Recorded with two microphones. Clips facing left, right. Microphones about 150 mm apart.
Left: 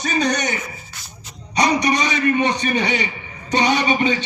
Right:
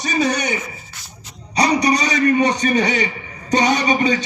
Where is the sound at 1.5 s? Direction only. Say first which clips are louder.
Right 1 dB; 35° right (ahead or behind).